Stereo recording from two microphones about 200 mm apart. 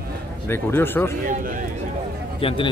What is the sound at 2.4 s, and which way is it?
Speech, 25° left (ahead or behind).